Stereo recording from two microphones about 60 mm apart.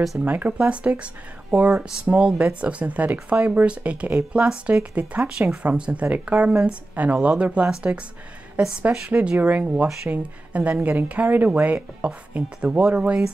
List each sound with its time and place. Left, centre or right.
0.2 s speech: right
9.4 s speech: right